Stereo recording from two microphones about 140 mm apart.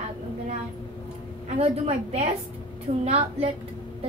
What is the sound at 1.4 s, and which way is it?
A woman's voice, 45° right (ahead or behind).